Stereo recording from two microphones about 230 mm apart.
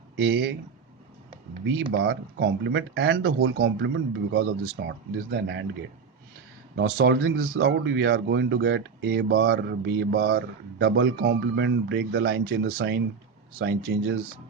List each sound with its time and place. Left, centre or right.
0.2 s speech: right
1.6 s speech: right
6.7 s speech: right